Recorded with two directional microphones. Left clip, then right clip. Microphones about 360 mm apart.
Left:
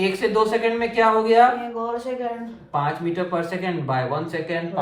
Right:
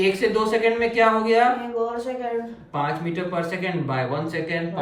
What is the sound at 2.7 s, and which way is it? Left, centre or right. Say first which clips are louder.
Speech: left 3 dB; centre.